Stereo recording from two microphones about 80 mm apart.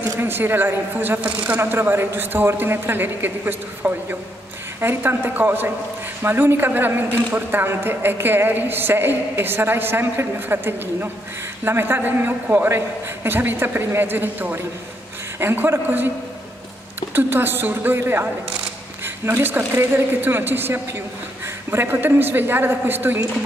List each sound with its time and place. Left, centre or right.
0.2 s a man's voice: right
17.1 s a man's voice: right